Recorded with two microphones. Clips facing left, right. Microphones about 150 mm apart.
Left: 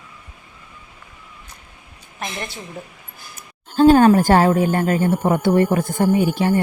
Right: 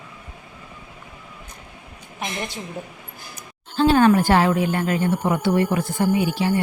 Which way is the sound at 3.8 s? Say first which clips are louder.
Left 4 dB; 40° left (ahead or behind).